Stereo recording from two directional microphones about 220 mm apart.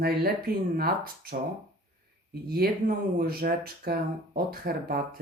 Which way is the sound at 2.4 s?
45° right (ahead or behind).